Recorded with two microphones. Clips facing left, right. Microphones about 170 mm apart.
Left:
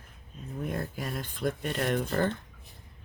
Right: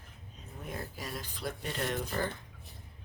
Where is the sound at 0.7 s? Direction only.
55° left (ahead or behind).